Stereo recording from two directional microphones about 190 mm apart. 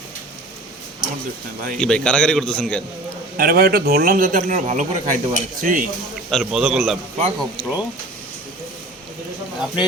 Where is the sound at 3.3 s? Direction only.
50° right (ahead or behind).